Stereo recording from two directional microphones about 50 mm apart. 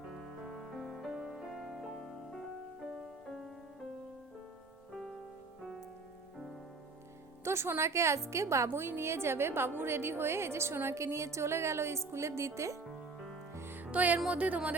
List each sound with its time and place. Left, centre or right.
0.1 s music: centre
7.4 s a woman's voice: right
10.9 s a woman's voice: right
12.8 s music: centre
13.6 s music: right
13.9 s music: right
14.3 s speech: right